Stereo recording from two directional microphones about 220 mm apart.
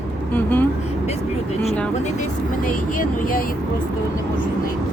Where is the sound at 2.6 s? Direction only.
40° left (ahead or behind).